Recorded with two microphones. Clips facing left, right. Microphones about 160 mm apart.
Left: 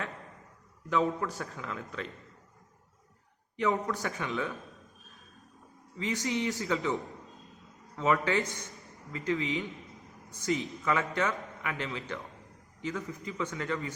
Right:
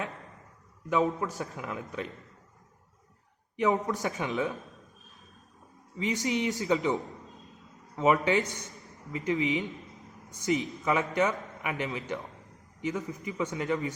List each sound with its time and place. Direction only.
0.9 s a man's voice: 15° right (ahead or behind)
3.6 s speech: 15° right (ahead or behind)
6.0 s a man's voice: 20° right (ahead or behind)